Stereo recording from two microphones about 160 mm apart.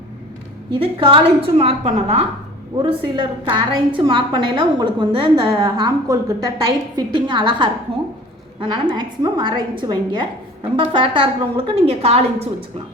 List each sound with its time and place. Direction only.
0.7 s a woman's voice: 30° right (ahead or behind)
2.7 s a woman's voice: 30° right (ahead or behind)